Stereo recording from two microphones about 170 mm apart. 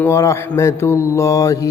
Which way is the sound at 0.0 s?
15° left (ahead or behind).